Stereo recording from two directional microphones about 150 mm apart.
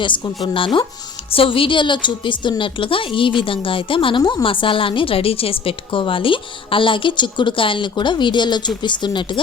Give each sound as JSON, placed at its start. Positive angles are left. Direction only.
{"t": 0.4, "sound": "a woman's voice", "side_deg": 35}